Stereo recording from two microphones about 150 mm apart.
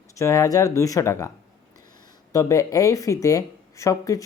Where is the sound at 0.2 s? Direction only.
20° left (ahead or behind).